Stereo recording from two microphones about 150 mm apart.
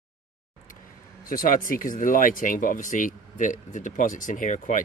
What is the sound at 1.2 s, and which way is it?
Speech, 70° left (ahead or behind).